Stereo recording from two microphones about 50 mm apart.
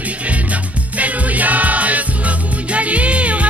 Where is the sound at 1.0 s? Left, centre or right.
Right.